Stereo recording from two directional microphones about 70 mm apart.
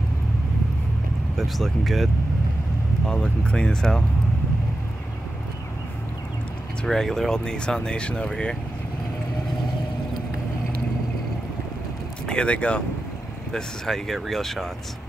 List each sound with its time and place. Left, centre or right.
1.3 s speech: centre
3.1 s speech: centre
6.8 s speech: centre
12.3 s speech: centre
13.5 s speech: centre